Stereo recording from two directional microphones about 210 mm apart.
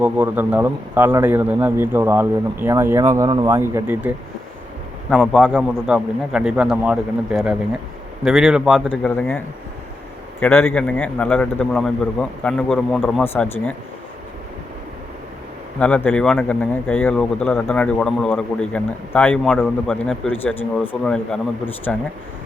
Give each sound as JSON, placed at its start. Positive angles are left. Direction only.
{"t": 0.0, "sound": "speech", "side_deg": -5}
{"t": 10.4, "sound": "speech", "side_deg": 10}
{"t": 15.8, "sound": "speech", "side_deg": 5}